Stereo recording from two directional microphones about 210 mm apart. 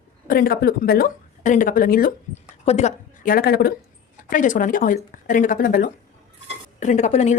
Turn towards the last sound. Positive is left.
turn(degrees=35)  # may be behind; listen again after turning